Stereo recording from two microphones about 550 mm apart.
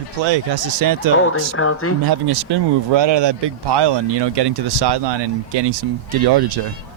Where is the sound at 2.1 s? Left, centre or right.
Right.